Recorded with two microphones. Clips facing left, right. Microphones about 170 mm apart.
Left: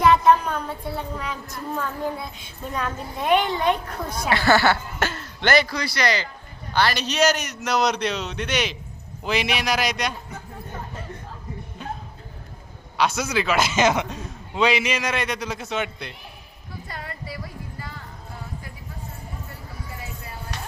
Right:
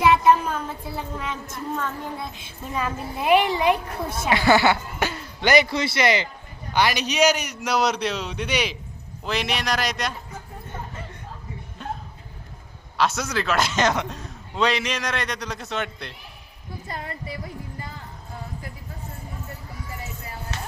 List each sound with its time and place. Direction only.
0.0 s a woman's voice: 5° right (ahead or behind)
4.3 s speech: 15° right (ahead or behind)
5.6 s a man's voice: 25° right (ahead or behind); by 10.2 s centre (ahead or behind)
13.0 s a woman's voice: centre (ahead or behind)
16.9 s music: 25° right (ahead or behind)